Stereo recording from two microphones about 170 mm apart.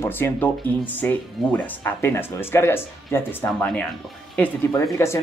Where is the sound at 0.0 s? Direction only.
10° left (ahead or behind).